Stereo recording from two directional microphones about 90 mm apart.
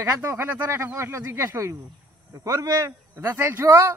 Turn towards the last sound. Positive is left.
turn(degrees=-20)  # may be behind; listen again after turning